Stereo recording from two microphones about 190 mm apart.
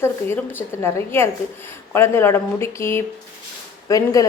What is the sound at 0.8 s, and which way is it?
A woman's voice, 15° left (ahead or behind).